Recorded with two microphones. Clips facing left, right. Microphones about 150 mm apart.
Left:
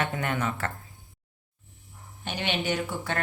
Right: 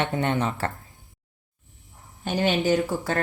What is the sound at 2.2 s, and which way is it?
Speech, 40° right (ahead or behind).